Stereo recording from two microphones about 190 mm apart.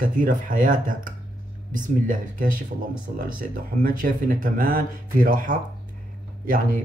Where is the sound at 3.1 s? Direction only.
45° right (ahead or behind).